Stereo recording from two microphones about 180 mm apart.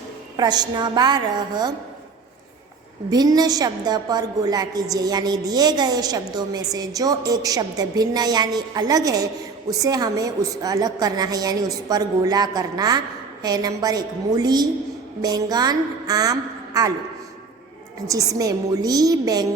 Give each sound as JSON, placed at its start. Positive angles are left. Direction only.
{"t": 0.3, "sound": "a woman's voice", "side_deg": -25}
{"t": 3.1, "sound": "a woman's voice", "side_deg": -20}
{"t": 18.1, "sound": "a woman's voice", "side_deg": -20}